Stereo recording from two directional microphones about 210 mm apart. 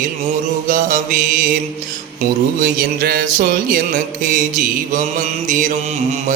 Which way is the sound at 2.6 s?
45° right (ahead or behind).